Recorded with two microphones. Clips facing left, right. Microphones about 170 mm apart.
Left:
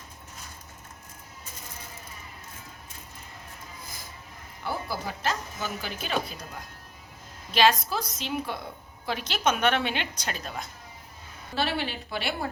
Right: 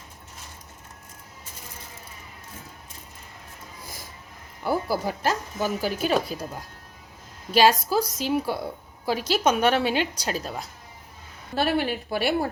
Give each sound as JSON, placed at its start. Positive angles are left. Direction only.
{"t": 4.6, "sound": "speech", "side_deg": -40}
{"t": 7.5, "sound": "speech", "side_deg": -40}
{"t": 7.9, "sound": "a woman's voice", "side_deg": -10}
{"t": 8.2, "sound": "speech", "side_deg": -40}
{"t": 11.5, "sound": "speech", "side_deg": -50}